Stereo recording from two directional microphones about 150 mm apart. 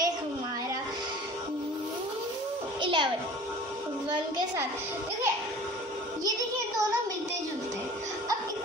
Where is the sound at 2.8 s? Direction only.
35° right (ahead or behind).